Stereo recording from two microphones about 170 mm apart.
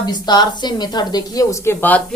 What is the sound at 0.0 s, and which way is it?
A woman's voice, 25° left (ahead or behind).